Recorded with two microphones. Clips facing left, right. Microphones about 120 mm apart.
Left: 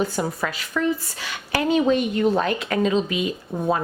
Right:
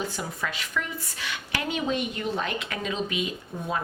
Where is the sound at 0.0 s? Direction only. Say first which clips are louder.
Left 8 dB; 45° left (ahead or behind).